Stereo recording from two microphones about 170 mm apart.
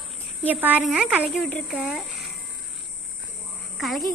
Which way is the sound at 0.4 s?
10° right (ahead or behind).